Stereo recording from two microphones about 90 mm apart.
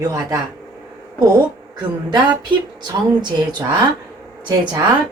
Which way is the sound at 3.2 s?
55° right (ahead or behind).